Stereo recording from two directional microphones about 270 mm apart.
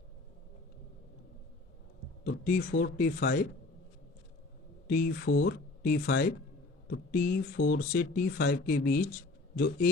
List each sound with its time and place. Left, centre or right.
2.2 s speech: left
4.9 s speech: left